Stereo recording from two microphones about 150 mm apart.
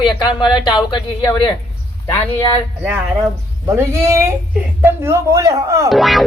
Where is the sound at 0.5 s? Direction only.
30° left (ahead or behind).